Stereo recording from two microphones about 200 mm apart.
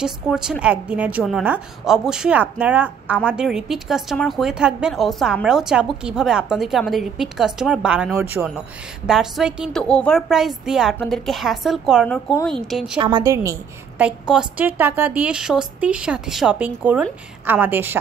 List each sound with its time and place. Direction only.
0.0 s speech: 5° right (ahead or behind)
13.0 s speech: 20° right (ahead or behind)